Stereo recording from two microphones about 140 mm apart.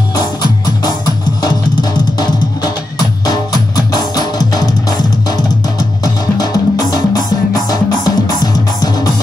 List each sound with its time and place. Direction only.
0.1 s music: 30° left (ahead or behind)
6.3 s music: 30° left (ahead or behind)